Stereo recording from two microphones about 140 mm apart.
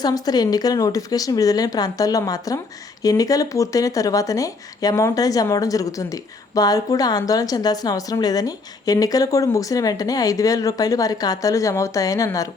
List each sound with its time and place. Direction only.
0.0 s speech: 30° left (ahead or behind)